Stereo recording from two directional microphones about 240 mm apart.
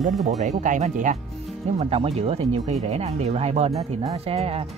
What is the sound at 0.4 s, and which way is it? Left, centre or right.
Speech, right.